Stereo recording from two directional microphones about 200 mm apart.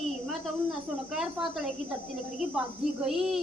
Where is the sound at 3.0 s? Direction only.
Centre (ahead or behind).